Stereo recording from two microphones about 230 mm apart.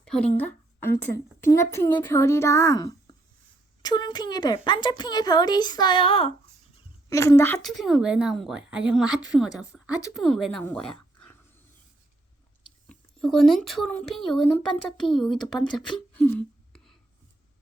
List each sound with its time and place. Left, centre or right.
0.0 s a woman's voice: centre; by 6.3 s left
7.1 s a woman's voice: centre
12.9 s a woman's voice: centre
16.1 s a sound: centre